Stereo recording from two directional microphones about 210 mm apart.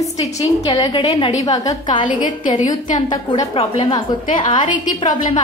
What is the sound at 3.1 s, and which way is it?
A woman's voice, 25° left (ahead or behind).